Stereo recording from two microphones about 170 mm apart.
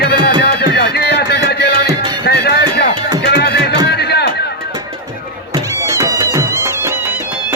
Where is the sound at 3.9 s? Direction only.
75° left (ahead or behind).